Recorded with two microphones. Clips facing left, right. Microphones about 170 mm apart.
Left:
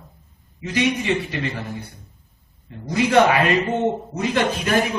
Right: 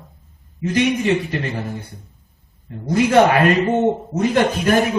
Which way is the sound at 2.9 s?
50° right (ahead or behind).